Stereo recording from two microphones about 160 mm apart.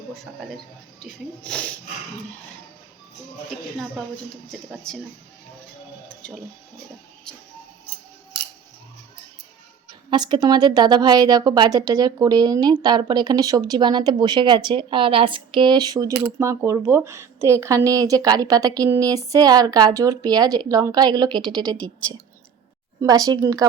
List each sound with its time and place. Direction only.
0.1 s speech: centre (ahead or behind)
4.7 s speech: 5° left (ahead or behind)
7.3 s speech: 5° left (ahead or behind)
10.1 s a woman's voice: 30° right (ahead or behind)
23.0 s a woman's voice: 20° right (ahead or behind)